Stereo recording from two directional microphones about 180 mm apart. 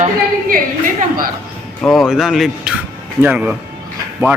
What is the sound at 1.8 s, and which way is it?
A man's voice, centre (ahead or behind).